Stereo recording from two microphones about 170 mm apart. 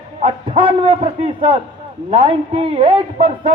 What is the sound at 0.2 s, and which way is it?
A man's voice, 30° right (ahead or behind).